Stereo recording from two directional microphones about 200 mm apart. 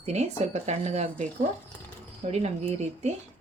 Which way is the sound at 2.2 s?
30° right (ahead or behind).